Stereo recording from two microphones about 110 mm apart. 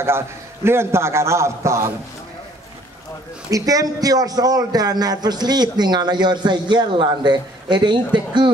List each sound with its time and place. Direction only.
0.7 s a man's voice: 25° right (ahead or behind)
3.4 s a man's voice: 30° right (ahead or behind)